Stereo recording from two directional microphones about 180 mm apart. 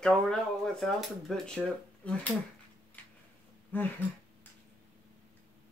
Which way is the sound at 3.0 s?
10° left (ahead or behind).